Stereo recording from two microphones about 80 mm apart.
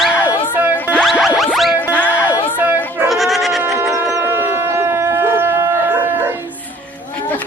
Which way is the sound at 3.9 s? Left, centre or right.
Right.